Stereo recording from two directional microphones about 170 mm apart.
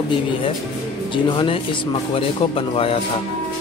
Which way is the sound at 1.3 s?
30° left (ahead or behind).